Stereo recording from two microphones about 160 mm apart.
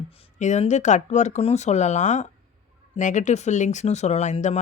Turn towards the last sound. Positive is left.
turn(degrees=45)  # may be behind; listen again after turning